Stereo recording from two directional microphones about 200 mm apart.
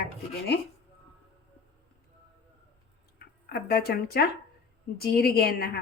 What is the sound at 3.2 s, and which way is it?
Speech, 50° left (ahead or behind).